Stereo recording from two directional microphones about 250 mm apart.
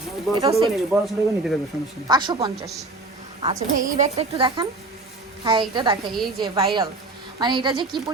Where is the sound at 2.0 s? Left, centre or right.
Centre.